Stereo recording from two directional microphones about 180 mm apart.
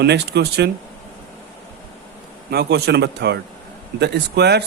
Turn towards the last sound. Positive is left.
turn(degrees=-65)  # may be behind; listen again after turning